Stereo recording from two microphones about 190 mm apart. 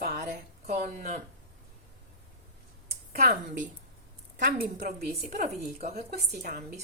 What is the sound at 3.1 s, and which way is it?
A woman's voice, 45° right (ahead or behind).